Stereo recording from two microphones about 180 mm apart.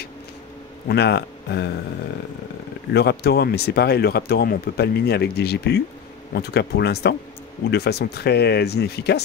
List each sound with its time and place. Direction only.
0.8 s speech: 65° left (ahead or behind)
2.9 s speech: 65° left (ahead or behind)